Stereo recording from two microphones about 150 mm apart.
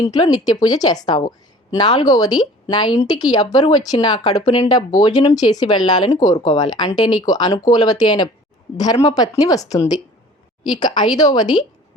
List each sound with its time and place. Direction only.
0.0 s speech: 25° left (ahead or behind)